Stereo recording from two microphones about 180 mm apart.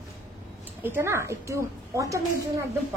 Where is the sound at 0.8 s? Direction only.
15° right (ahead or behind).